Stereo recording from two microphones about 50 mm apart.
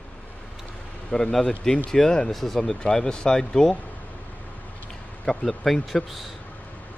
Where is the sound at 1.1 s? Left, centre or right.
Centre.